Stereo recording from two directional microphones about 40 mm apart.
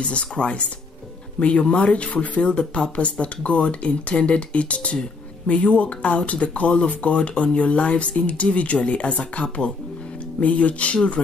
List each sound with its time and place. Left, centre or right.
0.1 s speech: left